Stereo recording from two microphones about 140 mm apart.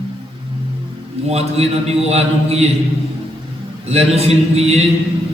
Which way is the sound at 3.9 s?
50° right (ahead or behind).